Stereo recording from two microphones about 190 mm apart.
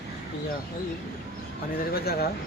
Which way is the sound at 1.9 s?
55° left (ahead or behind).